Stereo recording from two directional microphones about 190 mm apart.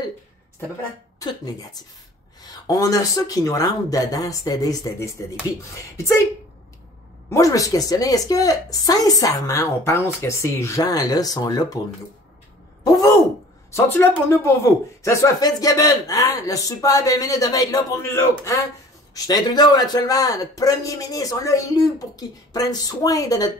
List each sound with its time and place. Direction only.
1.2 s a woman's voice: 20° left (ahead or behind)
7.2 s a woman's voice: 15° left (ahead or behind)
12.8 s a woman's voice: 15° left (ahead or behind)